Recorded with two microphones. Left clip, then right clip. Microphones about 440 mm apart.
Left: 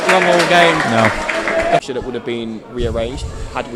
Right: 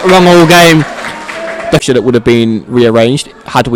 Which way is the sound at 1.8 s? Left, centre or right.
Right.